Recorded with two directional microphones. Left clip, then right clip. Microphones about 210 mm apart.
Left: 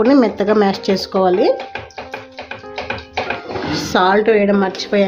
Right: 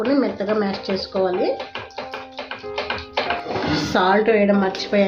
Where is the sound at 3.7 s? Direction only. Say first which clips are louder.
Left 4 dB; 55° left (ahead or behind).